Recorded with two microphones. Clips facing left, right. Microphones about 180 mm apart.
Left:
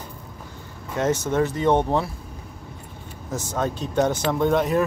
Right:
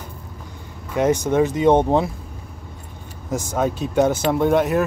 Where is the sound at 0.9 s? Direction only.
15° right (ahead or behind).